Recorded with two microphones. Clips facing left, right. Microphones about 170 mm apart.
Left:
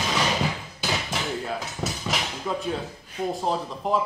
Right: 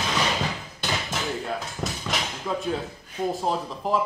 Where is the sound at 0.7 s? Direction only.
Centre (ahead or behind).